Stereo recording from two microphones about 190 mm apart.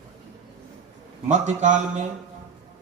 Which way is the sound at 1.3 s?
40° right (ahead or behind).